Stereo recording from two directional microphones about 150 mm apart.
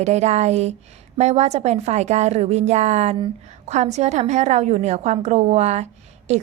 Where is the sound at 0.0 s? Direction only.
50° right (ahead or behind).